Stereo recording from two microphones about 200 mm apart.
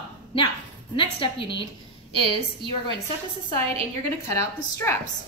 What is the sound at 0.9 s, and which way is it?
Speech, 25° left (ahead or behind).